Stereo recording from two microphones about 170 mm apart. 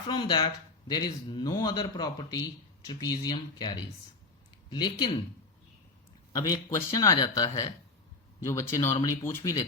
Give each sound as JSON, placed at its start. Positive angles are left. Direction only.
{"t": 0.1, "sound": "speech", "side_deg": 25}
{"t": 6.5, "sound": "speech", "side_deg": 20}